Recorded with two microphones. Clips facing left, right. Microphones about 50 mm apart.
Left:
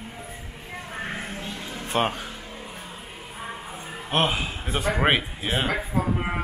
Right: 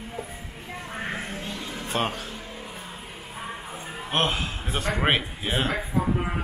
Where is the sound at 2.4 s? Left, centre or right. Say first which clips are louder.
Even; centre.